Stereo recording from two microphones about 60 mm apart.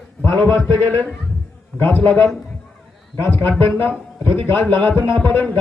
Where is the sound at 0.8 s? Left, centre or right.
Left.